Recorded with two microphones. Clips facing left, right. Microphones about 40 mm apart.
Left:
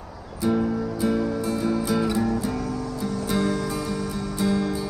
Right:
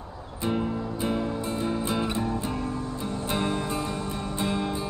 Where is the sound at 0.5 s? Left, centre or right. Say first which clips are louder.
Left 5 dB; right.